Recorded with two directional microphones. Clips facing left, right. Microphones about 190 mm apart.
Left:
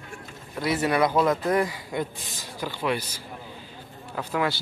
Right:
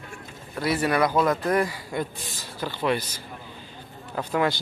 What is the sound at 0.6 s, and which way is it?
A man's voice, 20° left (ahead or behind).